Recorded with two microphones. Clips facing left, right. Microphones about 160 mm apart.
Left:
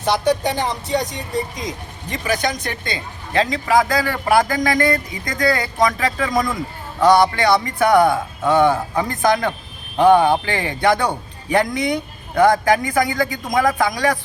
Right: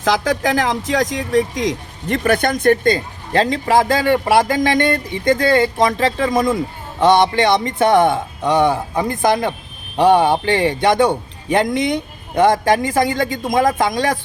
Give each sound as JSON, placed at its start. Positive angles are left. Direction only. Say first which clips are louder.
{"t": 0.0, "sound": "a man's voice", "louder": "right 1 dB", "side_deg": -90}